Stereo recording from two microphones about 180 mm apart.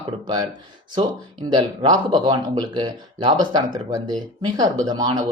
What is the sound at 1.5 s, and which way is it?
Speech, 25° right (ahead or behind).